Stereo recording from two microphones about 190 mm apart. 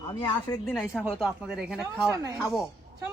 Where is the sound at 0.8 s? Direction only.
Centre (ahead or behind).